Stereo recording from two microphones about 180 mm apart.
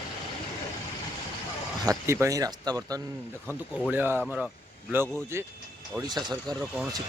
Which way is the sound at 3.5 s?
5° left (ahead or behind).